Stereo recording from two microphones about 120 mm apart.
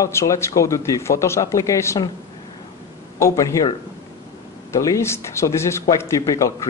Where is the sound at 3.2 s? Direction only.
25° left (ahead or behind).